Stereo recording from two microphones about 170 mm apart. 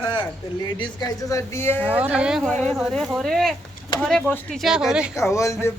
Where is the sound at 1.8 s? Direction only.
10° right (ahead or behind).